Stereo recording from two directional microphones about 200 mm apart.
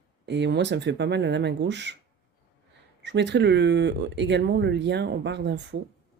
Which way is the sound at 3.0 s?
60° right (ahead or behind).